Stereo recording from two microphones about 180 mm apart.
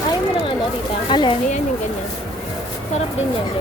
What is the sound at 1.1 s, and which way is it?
Speech, 25° left (ahead or behind).